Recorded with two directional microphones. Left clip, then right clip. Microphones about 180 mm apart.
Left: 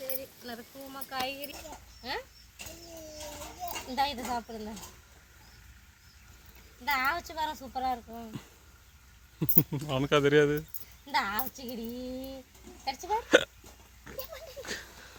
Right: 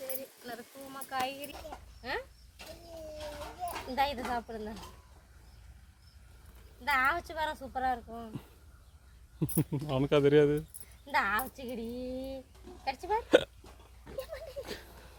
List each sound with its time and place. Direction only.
0.0 s a sound: centre (ahead or behind)
3.2 s children playing: 35° left (ahead or behind)
3.8 s speech: centre (ahead or behind)
6.8 s speech: centre (ahead or behind)
11.0 s speech: centre (ahead or behind)
14.1 s a sound: centre (ahead or behind)